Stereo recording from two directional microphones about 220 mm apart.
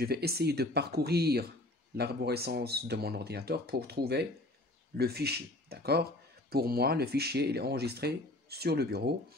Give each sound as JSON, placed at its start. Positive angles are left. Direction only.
{"t": 0.0, "sound": "speech", "side_deg": -45}